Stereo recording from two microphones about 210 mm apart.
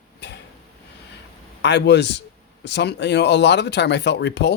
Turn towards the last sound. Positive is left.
turn(degrees=55)  # may be behind; listen again after turning